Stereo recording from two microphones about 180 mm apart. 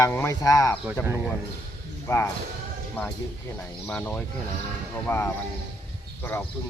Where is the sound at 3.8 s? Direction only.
10° left (ahead or behind).